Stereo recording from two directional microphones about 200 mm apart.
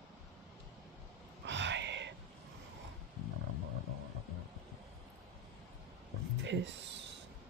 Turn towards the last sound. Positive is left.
turn(degrees=-65)  # may be behind; listen again after turning